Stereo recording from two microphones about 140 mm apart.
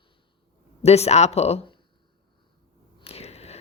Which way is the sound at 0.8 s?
50° left (ahead or behind).